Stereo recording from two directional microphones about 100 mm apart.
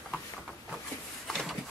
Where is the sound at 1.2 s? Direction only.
Centre (ahead or behind).